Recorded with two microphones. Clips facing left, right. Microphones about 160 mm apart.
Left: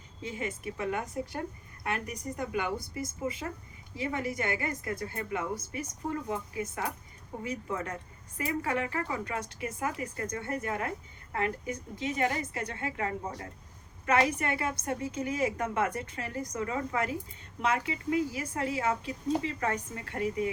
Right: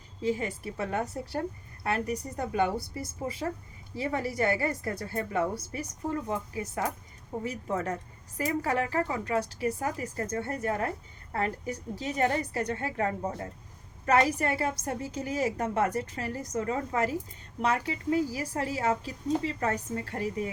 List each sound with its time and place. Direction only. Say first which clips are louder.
0.2 s a woman's voice: right 6 dB; 35° right (ahead or behind)